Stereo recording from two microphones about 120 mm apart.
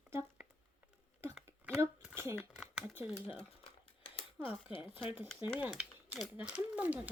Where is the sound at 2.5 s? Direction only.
5° right (ahead or behind).